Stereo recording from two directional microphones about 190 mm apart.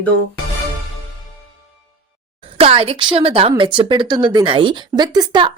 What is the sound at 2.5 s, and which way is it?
Speech, 30° right (ahead or behind).